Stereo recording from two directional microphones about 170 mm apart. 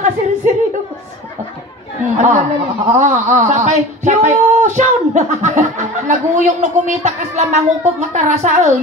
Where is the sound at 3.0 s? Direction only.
45° right (ahead or behind).